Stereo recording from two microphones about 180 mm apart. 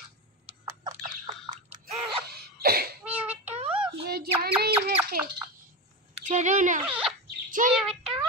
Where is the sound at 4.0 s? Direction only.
60° right (ahead or behind).